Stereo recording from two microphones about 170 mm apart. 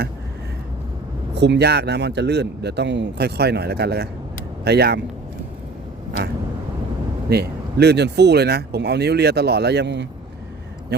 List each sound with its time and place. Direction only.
1.4 s speech: 85° right
7.3 s speech: 70° right (ahead or behind); by 10.1 s 90° right